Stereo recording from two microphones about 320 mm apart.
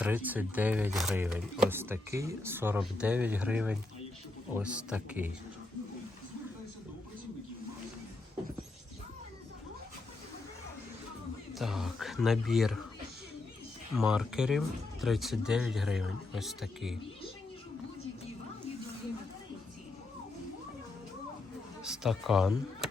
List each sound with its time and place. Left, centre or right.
0.0 s speech: centre
11.5 s speech: centre
13.9 s speech: centre
21.8 s speech: centre